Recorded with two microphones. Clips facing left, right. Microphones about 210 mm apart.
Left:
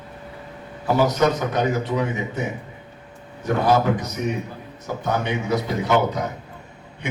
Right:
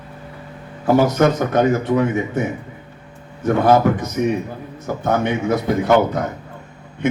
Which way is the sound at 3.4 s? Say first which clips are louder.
Right 5 dB; 50° right (ahead or behind).